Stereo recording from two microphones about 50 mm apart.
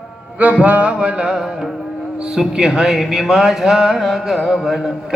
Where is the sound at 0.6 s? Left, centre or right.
Right.